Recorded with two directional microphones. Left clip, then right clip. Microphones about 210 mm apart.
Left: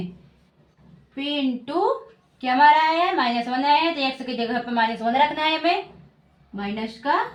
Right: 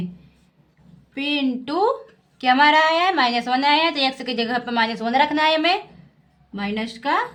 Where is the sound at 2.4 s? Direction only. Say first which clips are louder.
Right 1 dB; 35° right (ahead or behind).